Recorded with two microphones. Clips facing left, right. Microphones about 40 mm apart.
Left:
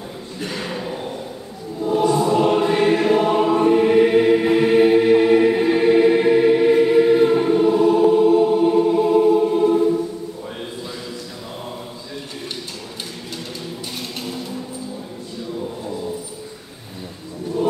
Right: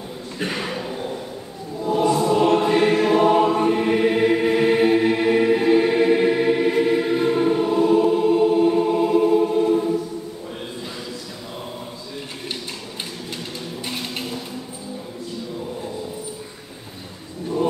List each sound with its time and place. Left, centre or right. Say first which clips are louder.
0.4 s speech: right 2 dB; right
0.7 s a sound: left 1 dB; centre
1.8 s choir: left 1 dB; centre